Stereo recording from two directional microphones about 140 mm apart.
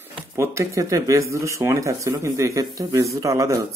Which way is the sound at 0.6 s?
20° right (ahead or behind).